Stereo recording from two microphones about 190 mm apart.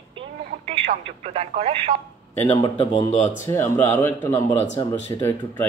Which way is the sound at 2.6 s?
25° left (ahead or behind).